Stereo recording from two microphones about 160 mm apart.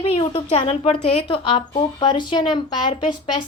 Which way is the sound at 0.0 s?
35° left (ahead or behind).